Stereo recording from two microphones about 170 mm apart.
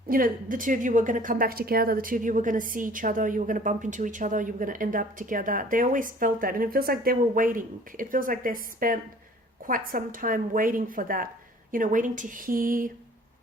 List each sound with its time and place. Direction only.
0.1 s a woman's voice: 55° right (ahead or behind)